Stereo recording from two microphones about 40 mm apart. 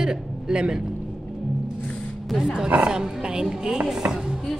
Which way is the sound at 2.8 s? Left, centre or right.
Centre.